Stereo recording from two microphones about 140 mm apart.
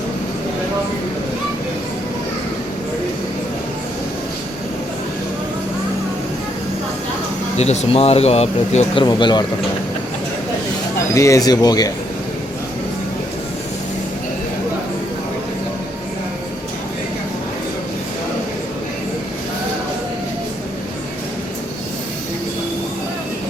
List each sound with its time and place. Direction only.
7.6 s speech: 55° left (ahead or behind)
9.0 s speech: 35° left (ahead or behind)
11.1 s speech: 20° left (ahead or behind)